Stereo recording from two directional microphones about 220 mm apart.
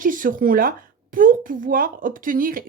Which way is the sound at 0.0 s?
40° right (ahead or behind).